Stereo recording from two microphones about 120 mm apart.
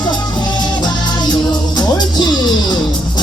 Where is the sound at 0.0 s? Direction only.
40° left (ahead or behind).